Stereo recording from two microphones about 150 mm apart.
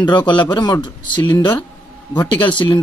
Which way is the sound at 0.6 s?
30° left (ahead or behind).